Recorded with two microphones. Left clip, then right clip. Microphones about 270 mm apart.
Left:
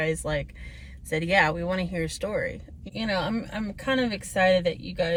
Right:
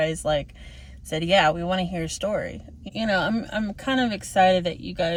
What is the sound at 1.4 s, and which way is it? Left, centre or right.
Speech, right.